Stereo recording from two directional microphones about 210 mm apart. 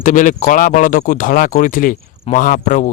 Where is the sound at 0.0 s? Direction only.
40° left (ahead or behind).